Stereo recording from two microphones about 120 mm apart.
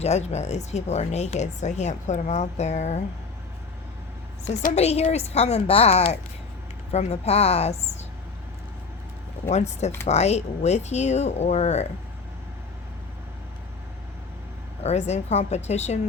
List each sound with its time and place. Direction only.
0.0 s speech: 65° left (ahead or behind)
4.4 s a woman's voice: 65° left (ahead or behind)
9.5 s speech: 70° left (ahead or behind)
14.8 s speech: 65° left (ahead or behind)